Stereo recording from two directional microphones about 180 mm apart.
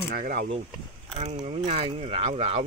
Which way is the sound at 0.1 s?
55° right (ahead or behind).